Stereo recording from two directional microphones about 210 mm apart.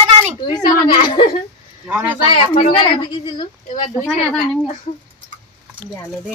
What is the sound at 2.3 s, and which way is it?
A woman's voice, 25° left (ahead or behind).